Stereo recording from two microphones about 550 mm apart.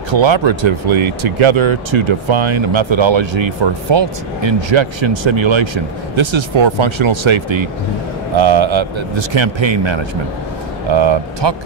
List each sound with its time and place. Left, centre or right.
0.1 s speech: right